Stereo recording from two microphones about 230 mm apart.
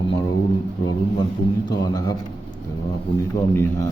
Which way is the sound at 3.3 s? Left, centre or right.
Centre.